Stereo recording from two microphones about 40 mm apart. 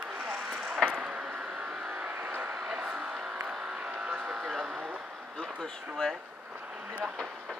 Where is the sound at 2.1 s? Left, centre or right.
Right.